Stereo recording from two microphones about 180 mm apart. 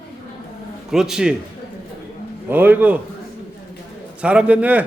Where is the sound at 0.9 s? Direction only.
5° right (ahead or behind).